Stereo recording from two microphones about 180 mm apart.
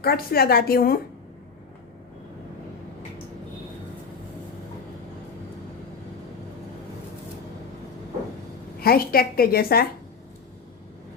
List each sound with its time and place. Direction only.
0.0 s a woman's voice: 60° left (ahead or behind)
8.8 s a woman's voice: 55° left (ahead or behind)